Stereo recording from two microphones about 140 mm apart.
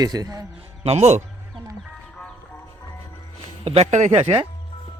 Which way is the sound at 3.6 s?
50° right (ahead or behind).